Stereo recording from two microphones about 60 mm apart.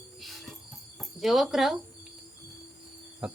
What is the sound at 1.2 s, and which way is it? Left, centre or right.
Speech, centre.